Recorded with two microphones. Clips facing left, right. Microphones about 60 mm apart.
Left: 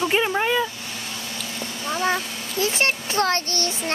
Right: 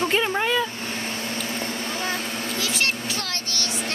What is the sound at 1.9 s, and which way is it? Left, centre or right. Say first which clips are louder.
Vehicle: left 9 dB; left.